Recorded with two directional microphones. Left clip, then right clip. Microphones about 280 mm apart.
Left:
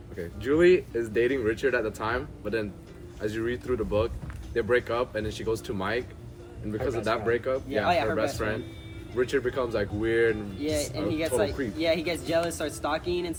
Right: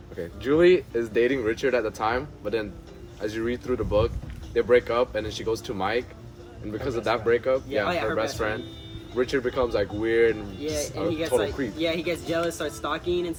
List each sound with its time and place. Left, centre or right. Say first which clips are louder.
0.4 s speech: right 2 dB; centre
7.9 s speech: left 2 dB; centre
8.1 s speech: right 2 dB; centre
11.2 s speech: right 1 dB; centre